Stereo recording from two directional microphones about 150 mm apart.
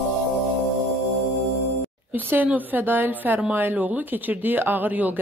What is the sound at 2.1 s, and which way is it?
A woman's voice, 10° right (ahead or behind).